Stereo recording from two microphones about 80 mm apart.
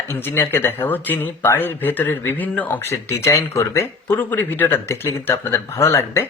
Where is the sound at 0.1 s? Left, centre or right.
Left.